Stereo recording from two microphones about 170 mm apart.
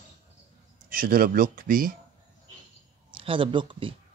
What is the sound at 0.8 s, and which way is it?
Speech, 60° right (ahead or behind).